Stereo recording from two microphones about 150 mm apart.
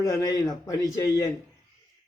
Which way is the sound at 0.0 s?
25° left (ahead or behind).